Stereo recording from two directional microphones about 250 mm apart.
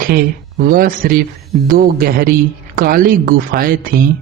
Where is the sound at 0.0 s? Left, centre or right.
Right.